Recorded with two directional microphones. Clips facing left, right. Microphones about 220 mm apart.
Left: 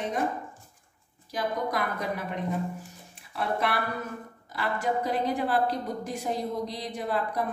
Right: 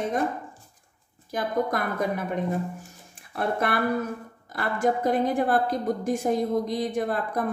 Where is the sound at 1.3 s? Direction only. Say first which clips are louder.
Right 4 dB; 50° right (ahead or behind).